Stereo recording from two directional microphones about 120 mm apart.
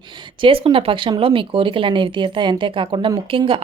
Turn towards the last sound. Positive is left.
turn(degrees=-50)  # may be behind; listen again after turning